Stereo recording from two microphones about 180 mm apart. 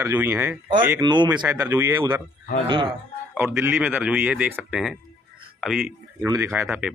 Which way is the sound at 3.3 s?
15° right (ahead or behind).